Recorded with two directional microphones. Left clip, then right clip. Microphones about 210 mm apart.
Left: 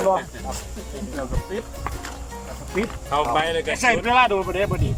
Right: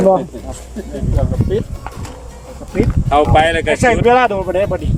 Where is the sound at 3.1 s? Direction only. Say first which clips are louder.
Right 10 dB; 50° right (ahead or behind).